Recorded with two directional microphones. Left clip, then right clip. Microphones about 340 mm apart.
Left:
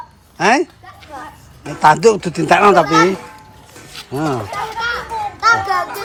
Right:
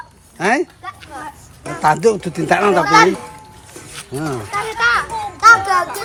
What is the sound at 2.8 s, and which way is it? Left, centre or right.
Speech, left.